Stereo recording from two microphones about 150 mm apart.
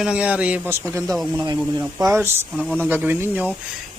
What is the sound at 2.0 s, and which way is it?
Speech, 20° right (ahead or behind).